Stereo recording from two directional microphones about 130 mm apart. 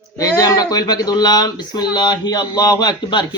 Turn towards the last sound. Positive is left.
turn(degrees=35)  # may be behind; listen again after turning